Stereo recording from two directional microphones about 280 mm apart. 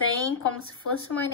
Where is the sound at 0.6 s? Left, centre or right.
Left.